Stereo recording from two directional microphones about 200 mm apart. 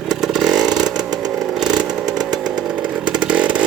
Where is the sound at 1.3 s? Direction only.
Centre (ahead or behind).